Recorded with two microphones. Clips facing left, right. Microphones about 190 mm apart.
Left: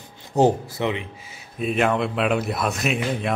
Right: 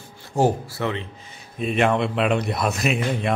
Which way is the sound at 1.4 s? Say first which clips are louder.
Right 1 dB; centre (ahead or behind).